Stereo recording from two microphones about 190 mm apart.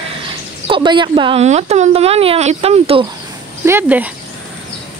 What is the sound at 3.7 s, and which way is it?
Speech, 10° right (ahead or behind).